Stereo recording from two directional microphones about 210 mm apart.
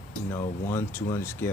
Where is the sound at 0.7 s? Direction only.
10° left (ahead or behind).